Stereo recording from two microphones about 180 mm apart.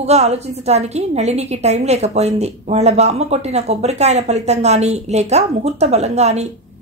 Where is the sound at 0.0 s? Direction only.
35° right (ahead or behind).